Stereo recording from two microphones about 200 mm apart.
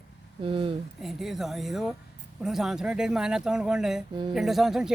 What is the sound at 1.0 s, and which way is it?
A man's voice, centre (ahead or behind).